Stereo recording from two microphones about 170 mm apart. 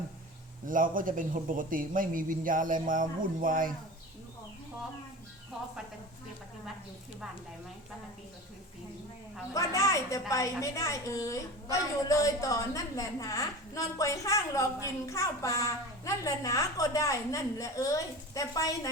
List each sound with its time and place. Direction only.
0.7 s a man's voice: 55° right (ahead or behind)
9.6 s a woman's voice: 20° left (ahead or behind)